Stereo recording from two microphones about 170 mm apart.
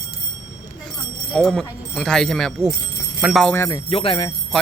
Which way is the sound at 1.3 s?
Centre (ahead or behind).